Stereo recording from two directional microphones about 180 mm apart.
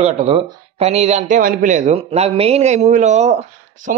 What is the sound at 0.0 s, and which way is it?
A man's voice, 35° right (ahead or behind).